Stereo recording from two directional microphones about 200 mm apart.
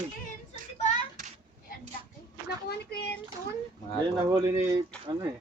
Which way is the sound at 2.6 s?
55° left (ahead or behind).